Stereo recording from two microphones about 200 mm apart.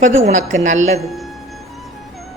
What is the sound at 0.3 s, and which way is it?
Speech, 40° right (ahead or behind).